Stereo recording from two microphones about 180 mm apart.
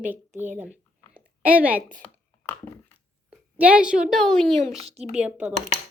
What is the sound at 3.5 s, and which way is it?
A child's voice, 5° right (ahead or behind).